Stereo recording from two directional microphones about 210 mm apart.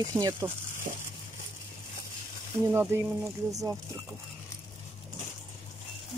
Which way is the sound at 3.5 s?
15° right (ahead or behind).